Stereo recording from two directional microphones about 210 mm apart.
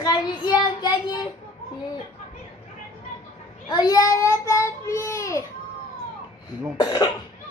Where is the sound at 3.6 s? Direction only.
20° left (ahead or behind).